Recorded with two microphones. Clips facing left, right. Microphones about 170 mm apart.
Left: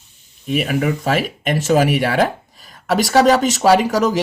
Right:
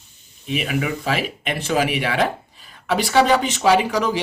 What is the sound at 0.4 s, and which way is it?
Speech, 45° left (ahead or behind).